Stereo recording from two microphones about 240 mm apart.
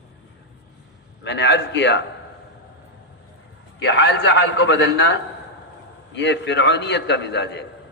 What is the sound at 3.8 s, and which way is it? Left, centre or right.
A man's voice, left.